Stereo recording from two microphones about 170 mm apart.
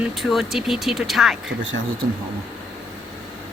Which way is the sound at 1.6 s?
90° right.